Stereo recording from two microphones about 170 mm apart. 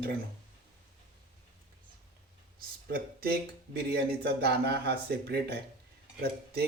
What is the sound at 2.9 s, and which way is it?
Speech, 65° right (ahead or behind).